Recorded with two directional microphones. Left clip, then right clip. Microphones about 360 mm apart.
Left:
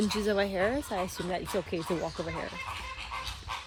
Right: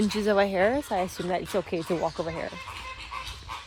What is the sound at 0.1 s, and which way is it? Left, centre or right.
Speech, centre.